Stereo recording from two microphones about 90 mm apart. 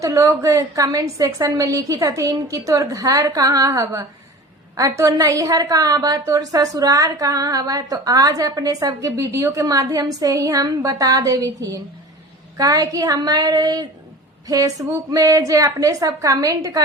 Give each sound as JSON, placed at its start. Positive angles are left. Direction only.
{"t": 0.0, "sound": "a woman's voice", "side_deg": -40}